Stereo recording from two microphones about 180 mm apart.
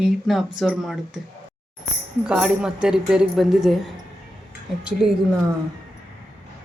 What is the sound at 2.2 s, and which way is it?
Speech, 5° right (ahead or behind).